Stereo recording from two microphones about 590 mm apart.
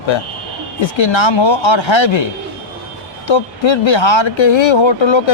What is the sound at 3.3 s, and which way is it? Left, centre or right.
Speech, left.